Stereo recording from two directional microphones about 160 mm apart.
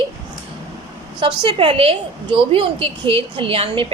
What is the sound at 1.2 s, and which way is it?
A woman's voice, 30° right (ahead or behind).